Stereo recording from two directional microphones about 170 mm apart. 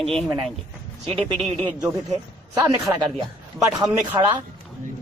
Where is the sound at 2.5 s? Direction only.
20° right (ahead or behind).